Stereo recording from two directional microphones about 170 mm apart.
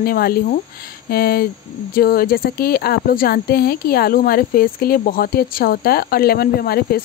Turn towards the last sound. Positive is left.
turn(degrees=65)  # may be behind; listen again after turning